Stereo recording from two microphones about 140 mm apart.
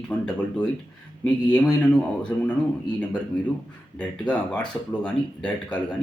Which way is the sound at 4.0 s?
10° left (ahead or behind).